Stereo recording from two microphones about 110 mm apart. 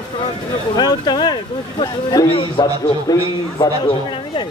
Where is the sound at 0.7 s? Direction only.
40° left (ahead or behind).